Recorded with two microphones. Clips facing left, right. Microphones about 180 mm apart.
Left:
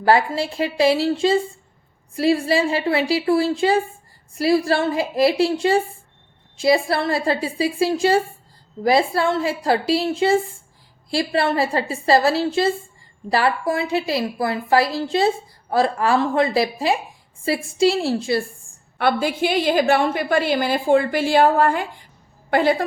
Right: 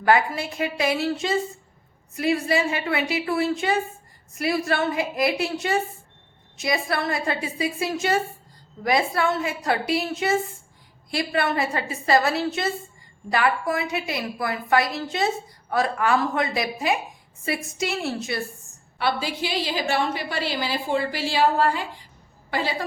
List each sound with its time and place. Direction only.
0.0 s a woman's voice: 30° left (ahead or behind)
18.9 s a woman's voice: 55° left (ahead or behind)